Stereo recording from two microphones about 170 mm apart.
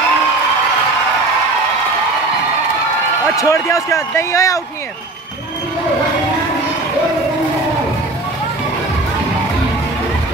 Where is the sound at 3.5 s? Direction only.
15° left (ahead or behind).